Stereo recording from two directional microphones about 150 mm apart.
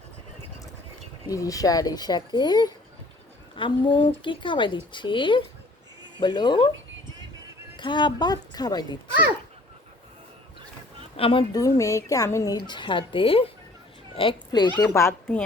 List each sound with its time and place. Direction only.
1.3 s a woman's voice: 25° left (ahead or behind)
7.8 s a woman's voice: 30° left (ahead or behind)
11.2 s a woman's voice: 35° left (ahead or behind)
11.5 s a woman's voice: 20° left (ahead or behind)
14.8 s a woman's voice: 15° left (ahead or behind)